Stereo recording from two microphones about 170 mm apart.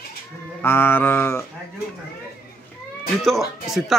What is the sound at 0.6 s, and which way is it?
Speech, 15° left (ahead or behind).